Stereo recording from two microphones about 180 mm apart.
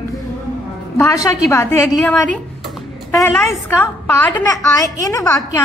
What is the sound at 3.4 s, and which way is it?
A woman's voice, 15° left (ahead or behind).